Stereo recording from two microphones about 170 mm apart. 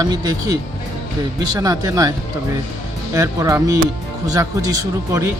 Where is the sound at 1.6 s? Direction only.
20° right (ahead or behind).